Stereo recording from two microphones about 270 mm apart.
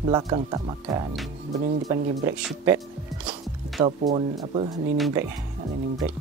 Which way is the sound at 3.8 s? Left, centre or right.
Centre.